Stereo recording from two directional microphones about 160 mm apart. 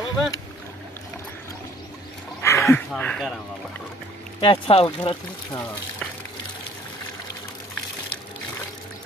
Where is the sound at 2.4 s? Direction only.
15° left (ahead or behind).